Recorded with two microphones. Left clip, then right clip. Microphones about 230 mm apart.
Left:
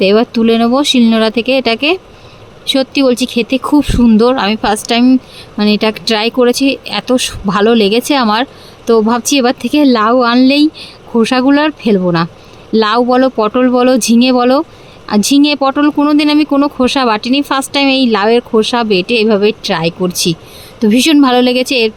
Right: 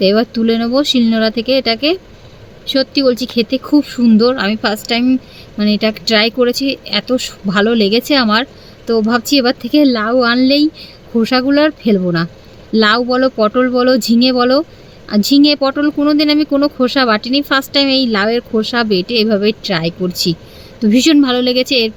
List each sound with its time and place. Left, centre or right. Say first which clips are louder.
0.0 s speech: left 3 dB; left